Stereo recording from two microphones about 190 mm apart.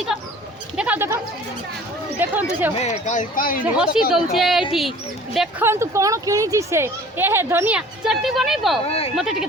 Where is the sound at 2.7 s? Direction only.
35° left (ahead or behind).